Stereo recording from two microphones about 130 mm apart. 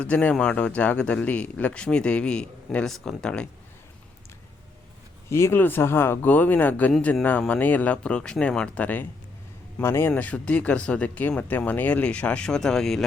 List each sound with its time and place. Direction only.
0.0 s a man's voice: 10° left (ahead or behind)
5.3 s a man's voice: 20° left (ahead or behind); by 13.1 s 5° left (ahead or behind)